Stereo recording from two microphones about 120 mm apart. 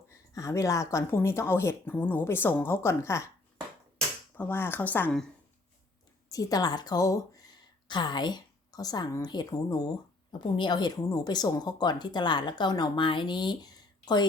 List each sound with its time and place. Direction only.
0.1 s speech: 25° left (ahead or behind)
4.4 s speech: 15° left (ahead or behind)
6.3 s speech: 30° left (ahead or behind)